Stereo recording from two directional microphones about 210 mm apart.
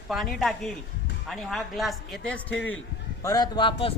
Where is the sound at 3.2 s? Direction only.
20° left (ahead or behind).